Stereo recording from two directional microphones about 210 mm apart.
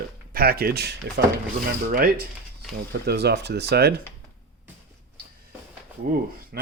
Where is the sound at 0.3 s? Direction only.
45° right (ahead or behind).